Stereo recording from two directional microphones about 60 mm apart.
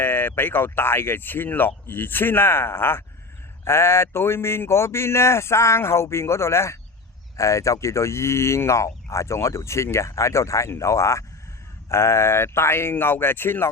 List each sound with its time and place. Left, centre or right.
0.0 s speech: left